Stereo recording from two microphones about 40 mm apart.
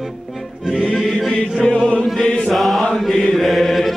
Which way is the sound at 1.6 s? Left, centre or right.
Left.